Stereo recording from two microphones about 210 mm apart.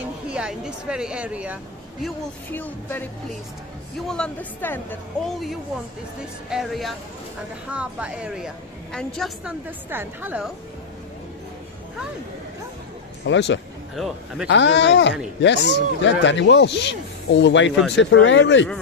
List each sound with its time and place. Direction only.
0.3 s speech: 5° right (ahead or behind)
4.1 s speech: 5° left (ahead or behind)
13.2 s speech: 60° left (ahead or behind)
13.9 s speech: centre (ahead or behind)
14.5 s speech: 60° left (ahead or behind)